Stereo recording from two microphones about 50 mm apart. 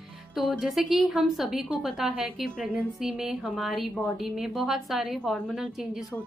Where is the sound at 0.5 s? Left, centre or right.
Centre.